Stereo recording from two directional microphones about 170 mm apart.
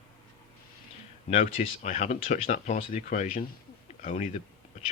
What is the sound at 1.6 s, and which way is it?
Speech, 40° left (ahead or behind).